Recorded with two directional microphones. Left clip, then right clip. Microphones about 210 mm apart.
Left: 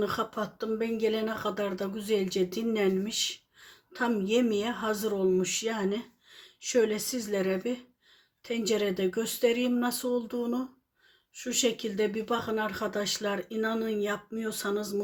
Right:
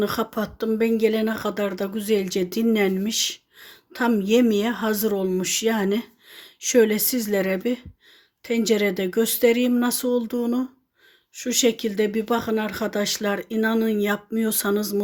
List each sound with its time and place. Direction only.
0.0 s speech: 40° right (ahead or behind)